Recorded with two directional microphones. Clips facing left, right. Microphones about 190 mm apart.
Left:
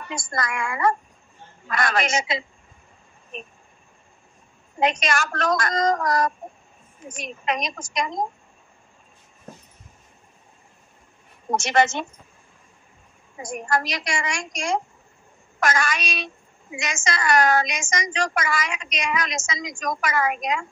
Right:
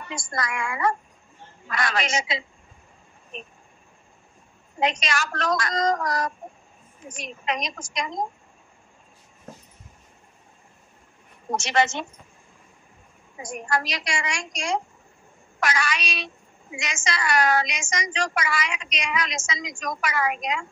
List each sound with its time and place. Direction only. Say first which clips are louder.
0.1 s a woman's voice: left 2 dB; 50° left (ahead or behind)
4.7 s a woman's voice: left 3 dB; 50° left (ahead or behind)
11.5 s a woman's voice: left 3 dB; 50° left (ahead or behind)
13.4 s a woman's voice: left 2 dB; 50° left (ahead or behind)